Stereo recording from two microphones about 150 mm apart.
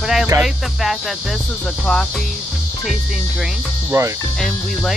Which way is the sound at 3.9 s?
20° right (ahead or behind).